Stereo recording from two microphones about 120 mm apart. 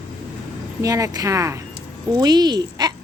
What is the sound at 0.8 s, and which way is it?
Speech, 30° right (ahead or behind).